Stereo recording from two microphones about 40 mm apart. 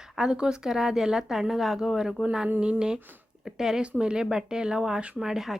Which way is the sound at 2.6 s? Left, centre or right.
Right.